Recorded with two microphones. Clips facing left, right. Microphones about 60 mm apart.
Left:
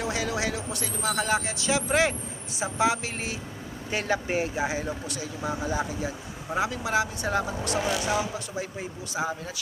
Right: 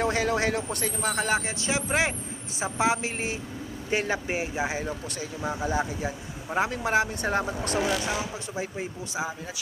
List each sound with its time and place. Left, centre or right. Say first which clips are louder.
0.0 s speech: right 4 dB; right
5.0 s speech: even; right
7.9 s speech: even; centre
8.5 s speech: right 1 dB; right